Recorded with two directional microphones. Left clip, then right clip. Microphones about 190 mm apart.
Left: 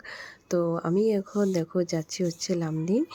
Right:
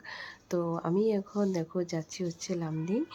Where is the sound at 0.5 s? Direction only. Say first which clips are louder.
Left 5 dB; 20° left (ahead or behind).